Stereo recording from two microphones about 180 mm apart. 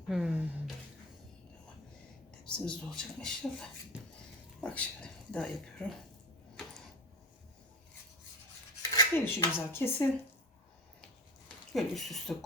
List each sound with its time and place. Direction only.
0.1 s a sound: 5° right (ahead or behind)
2.4 s speech: 5° left (ahead or behind)
8.8 s cutlery: 15° left (ahead or behind)
11.4 s speech: centre (ahead or behind)